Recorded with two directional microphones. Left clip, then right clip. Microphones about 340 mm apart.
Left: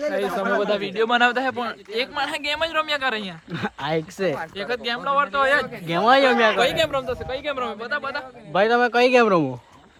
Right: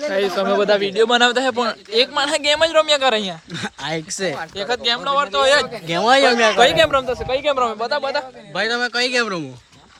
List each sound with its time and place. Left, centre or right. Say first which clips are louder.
0.1 s speech: right 7 dB; right
0.8 s a man's voice: right 4 dB; centre
3.5 s speech: left 4 dB; centre
4.5 s a man's voice: right 6 dB; centre
6.5 s speech: right 6 dB; right
8.5 s speech: left 2 dB; centre